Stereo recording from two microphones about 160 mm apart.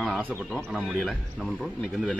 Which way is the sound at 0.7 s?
5° right (ahead or behind).